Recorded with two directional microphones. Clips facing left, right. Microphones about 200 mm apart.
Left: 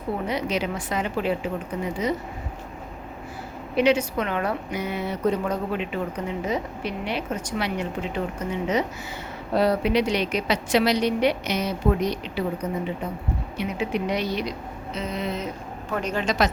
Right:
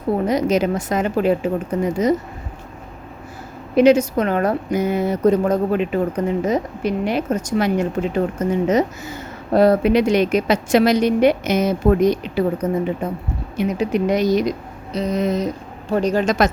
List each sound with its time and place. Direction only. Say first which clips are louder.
0.3 s a woman's voice: right 9 dB; 45° right (ahead or behind)
3.8 s a woman's voice: right 8 dB; 45° right (ahead or behind)